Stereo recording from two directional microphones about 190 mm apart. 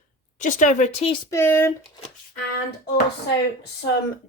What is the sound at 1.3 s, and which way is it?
Speech, 10° left (ahead or behind).